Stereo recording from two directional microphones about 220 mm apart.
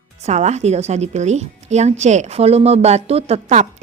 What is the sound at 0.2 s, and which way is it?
A woman's voice, 30° right (ahead or behind).